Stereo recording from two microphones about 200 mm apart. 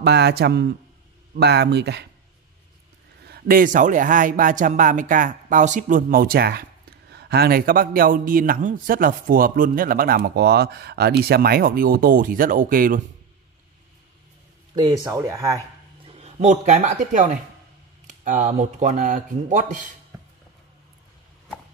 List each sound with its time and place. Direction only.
0.0 s speech: 55° right (ahead or behind)
3.3 s speech: 50° right (ahead or behind)
14.8 s speech: 20° right (ahead or behind)
16.2 s speech: 35° right (ahead or behind)